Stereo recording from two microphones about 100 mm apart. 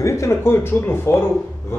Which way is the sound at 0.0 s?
30° left (ahead or behind).